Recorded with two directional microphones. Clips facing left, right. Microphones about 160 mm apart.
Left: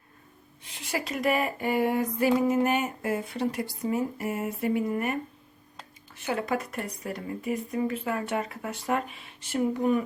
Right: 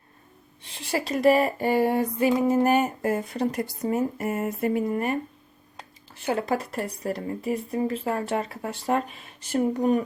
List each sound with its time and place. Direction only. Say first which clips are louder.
0.6 s speech: right 4 dB; 35° right (ahead or behind)
6.2 s speech: right 3 dB; 35° right (ahead or behind)